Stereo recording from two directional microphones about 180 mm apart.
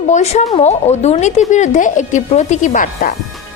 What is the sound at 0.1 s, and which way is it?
A woman's voice, 40° left (ahead or behind).